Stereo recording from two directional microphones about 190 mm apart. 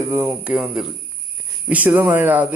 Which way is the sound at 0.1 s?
10° right (ahead or behind).